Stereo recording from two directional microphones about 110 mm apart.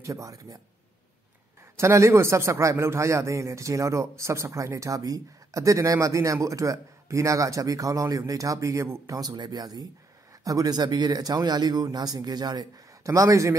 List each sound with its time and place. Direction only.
0.0 s speech: 30° right (ahead or behind)
1.8 s speech: 25° right (ahead or behind)